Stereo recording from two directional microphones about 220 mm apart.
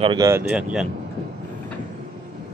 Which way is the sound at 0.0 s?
20° right (ahead or behind).